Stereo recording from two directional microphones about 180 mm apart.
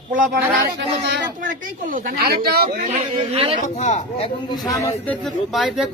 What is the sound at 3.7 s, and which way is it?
Speech, 35° left (ahead or behind).